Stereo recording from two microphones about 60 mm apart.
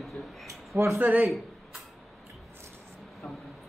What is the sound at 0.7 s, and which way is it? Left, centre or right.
Speech, right.